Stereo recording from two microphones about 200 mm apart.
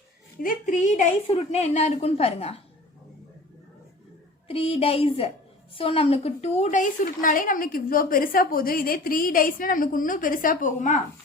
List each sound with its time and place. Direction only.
0.4 s a woman's voice: 40° left (ahead or behind)
4.4 s a woman's voice: 30° left (ahead or behind)